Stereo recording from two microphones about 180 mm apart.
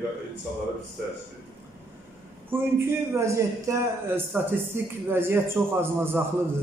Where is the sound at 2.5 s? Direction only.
10° right (ahead or behind).